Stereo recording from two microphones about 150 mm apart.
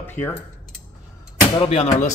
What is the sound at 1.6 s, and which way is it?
Speech, 40° left (ahead or behind).